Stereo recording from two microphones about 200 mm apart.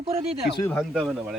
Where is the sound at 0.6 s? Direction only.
Centre (ahead or behind).